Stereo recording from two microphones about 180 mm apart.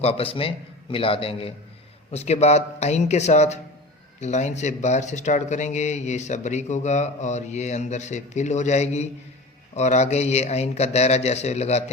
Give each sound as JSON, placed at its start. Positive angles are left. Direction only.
{"t": 0.0, "sound": "speech", "side_deg": 30}